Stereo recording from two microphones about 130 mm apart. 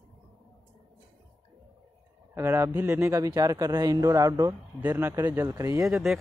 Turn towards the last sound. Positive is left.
turn(degrees=0)  # may be behind; listen again after turning